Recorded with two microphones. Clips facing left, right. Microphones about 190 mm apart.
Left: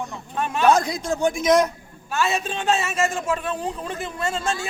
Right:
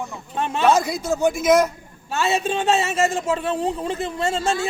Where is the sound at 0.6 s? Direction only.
5° right (ahead or behind).